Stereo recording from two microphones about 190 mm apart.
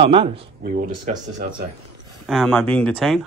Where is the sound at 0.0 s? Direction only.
30° right (ahead or behind).